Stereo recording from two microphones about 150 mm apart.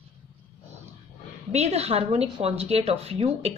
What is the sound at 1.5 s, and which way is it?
A woman's voice, 45° right (ahead or behind).